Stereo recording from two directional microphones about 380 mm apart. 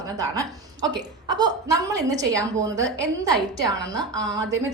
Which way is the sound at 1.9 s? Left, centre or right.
Centre.